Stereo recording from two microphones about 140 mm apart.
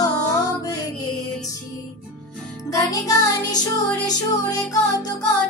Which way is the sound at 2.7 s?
25° left (ahead or behind).